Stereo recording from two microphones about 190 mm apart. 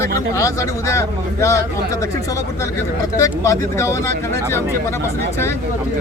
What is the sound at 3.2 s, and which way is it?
Speech, 15° left (ahead or behind).